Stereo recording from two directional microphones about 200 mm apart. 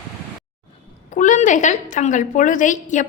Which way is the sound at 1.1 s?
40° left (ahead or behind).